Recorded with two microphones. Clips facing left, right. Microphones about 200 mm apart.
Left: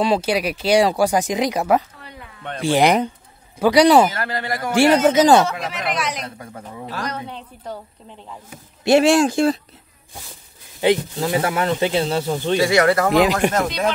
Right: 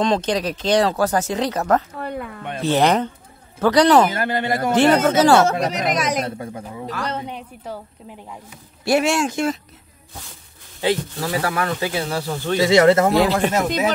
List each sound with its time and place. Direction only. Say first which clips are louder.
0.0 s speech: left 1 dB; 10° left (ahead or behind)
2.0 s a sound: right 13 dB; 55° right (ahead or behind)
2.6 s speech: left 1 dB; 10° left (ahead or behind)
4.1 s a man's voice: right 4 dB; 20° right (ahead or behind)
4.7 s speech: left 2 dB; 10° left (ahead or behind)
5.5 s speech: right 5 dB; 40° right (ahead or behind)
7.1 s a man's voice: right 2 dB; 20° right (ahead or behind)
7.6 s a woman's voice: even; 5° right (ahead or behind)
8.8 s speech: left 5 dB; 30° left (ahead or behind)
10.8 s speech: left 3 dB; 20° left (ahead or behind)
12.5 s a man's voice: right 3 dB; 20° right (ahead or behind)
13.2 s speech: left 1 dB; 15° left (ahead or behind)